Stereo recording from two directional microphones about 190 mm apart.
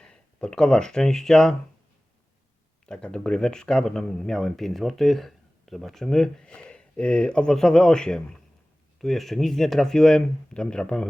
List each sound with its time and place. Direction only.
0.0 s speech: 5° left (ahead or behind)
2.8 s speech: 5° left (ahead or behind)